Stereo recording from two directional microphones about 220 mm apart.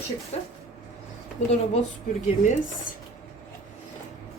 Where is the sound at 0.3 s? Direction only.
30° left (ahead or behind).